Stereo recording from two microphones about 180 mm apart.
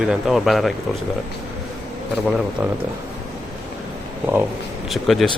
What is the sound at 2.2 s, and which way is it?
Speech, centre (ahead or behind).